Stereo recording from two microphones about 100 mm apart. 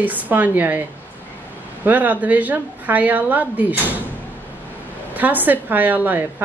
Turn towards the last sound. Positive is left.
turn(degrees=-20)  # may be behind; listen again after turning